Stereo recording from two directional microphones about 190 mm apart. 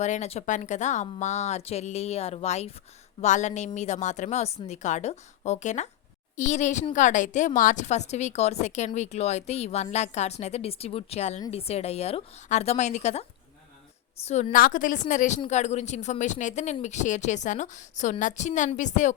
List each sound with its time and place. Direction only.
0.0 s a woman's voice: 35° left (ahead or behind)
14.3 s a woman's voice: 35° left (ahead or behind)